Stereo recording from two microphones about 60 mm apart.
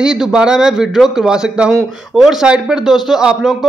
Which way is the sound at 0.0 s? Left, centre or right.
Centre.